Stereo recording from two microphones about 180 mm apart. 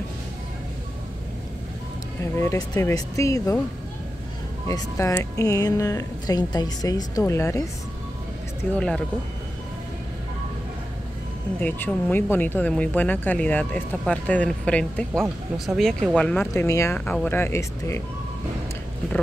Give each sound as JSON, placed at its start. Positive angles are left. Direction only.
{"t": 2.4, "sound": "speech", "side_deg": 15}
{"t": 4.6, "sound": "speech", "side_deg": 15}
{"t": 8.7, "sound": "speech", "side_deg": 5}
{"t": 11.6, "sound": "speech", "side_deg": 10}